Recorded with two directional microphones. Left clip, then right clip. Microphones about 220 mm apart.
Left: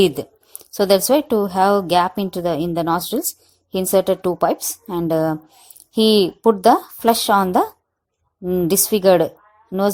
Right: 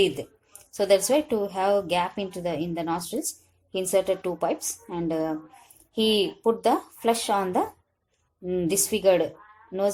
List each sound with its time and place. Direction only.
0.0 s a woman's voice: 30° left (ahead or behind)